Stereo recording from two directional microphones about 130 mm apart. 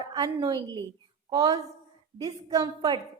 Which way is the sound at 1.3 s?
25° right (ahead or behind).